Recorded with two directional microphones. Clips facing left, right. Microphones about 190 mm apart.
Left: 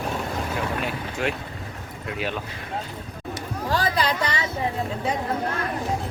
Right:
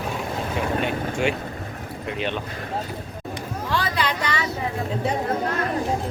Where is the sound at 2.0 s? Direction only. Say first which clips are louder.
Right 2 dB; 5° left (ahead or behind).